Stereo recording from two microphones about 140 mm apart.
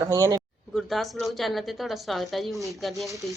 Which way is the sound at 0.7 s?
Centre (ahead or behind).